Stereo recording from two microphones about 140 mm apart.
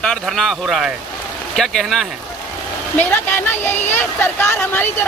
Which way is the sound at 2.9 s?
15° left (ahead or behind).